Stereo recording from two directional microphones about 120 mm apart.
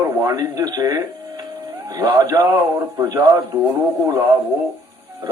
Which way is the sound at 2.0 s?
30° right (ahead or behind).